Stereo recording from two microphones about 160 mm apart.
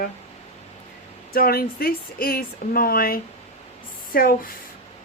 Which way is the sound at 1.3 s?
70° left (ahead or behind).